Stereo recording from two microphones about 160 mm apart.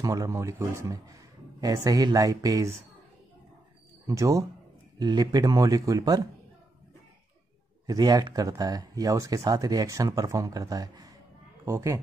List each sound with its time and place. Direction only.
0.0 s speech: 20° right (ahead or behind)
4.1 s speech: 20° right (ahead or behind)
7.8 s a woman's voice: 25° right (ahead or behind)